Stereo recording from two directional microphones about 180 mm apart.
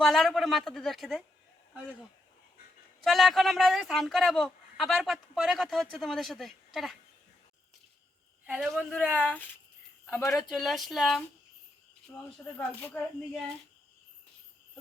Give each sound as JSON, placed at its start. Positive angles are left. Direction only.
{"t": 0.0, "sound": "speech", "side_deg": 0}
{"t": 3.0, "sound": "speech", "side_deg": 0}
{"t": 8.4, "sound": "speech", "side_deg": 0}
{"t": 10.5, "sound": "speech", "side_deg": 0}
{"t": 12.5, "sound": "speech", "side_deg": 10}